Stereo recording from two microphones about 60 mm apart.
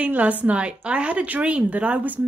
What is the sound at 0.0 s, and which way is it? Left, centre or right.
A woman's voice, right.